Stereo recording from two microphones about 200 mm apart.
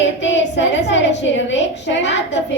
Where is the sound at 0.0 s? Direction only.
65° left (ahead or behind).